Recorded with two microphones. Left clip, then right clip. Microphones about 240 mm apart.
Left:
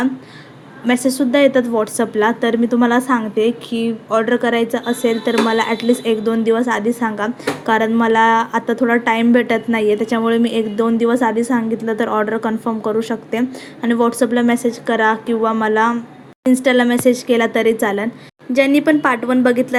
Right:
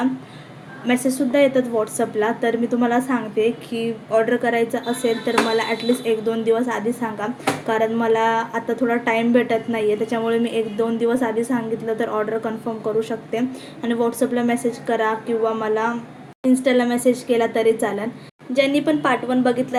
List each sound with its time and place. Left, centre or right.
0.9 s a woman's voice: left